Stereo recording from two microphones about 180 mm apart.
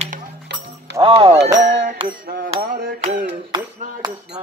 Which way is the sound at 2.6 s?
55° right (ahead or behind).